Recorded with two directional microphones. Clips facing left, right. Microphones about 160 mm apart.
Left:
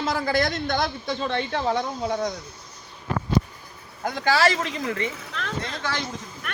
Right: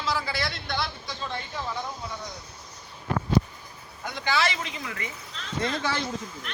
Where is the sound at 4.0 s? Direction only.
40° left (ahead or behind).